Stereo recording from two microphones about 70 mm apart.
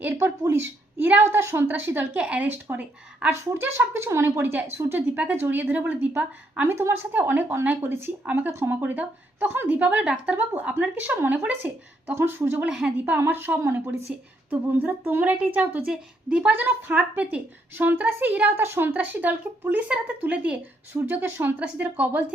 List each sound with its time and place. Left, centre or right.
0.2 s a woman's voice: right
3.3 s a woman's voice: right
12.1 s a woman's voice: right
12.6 s a woman's voice: centre
13.1 s a woman's voice: right
14.1 s a woman's voice: centre
16.5 s a woman's voice: right
17.7 s a woman's voice: right
20.9 s a woman's voice: right